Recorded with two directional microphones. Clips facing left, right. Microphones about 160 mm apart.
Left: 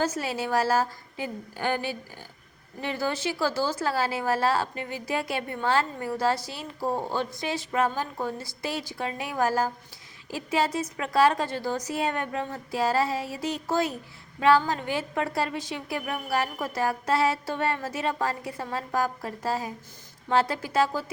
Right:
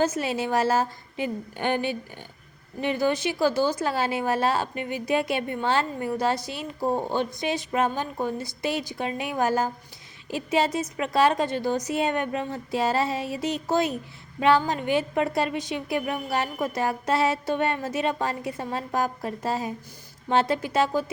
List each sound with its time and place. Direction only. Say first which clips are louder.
0.0 s a woman's voice: right 3 dB; 20° right (ahead or behind)